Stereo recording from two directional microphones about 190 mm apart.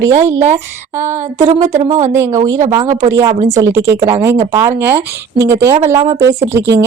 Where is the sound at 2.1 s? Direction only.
15° right (ahead or behind).